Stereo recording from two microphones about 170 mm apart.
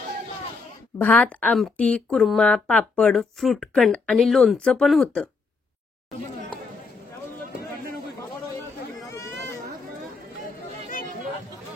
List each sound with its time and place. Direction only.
0.9 s speech: 10° left (ahead or behind)
10.4 s chatter: 55° left (ahead or behind)